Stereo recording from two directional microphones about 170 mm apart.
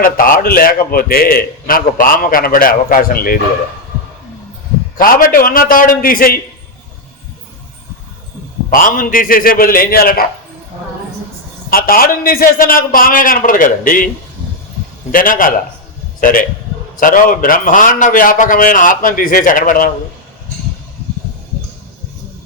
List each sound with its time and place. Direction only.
0.0 s a man's voice: 55° left (ahead or behind)
4.9 s a man's voice: 55° left (ahead or behind)
8.7 s a man's voice: 55° left (ahead or behind)
11.7 s a man's voice: 60° left (ahead or behind)
15.1 s a man's voice: 55° left (ahead or behind)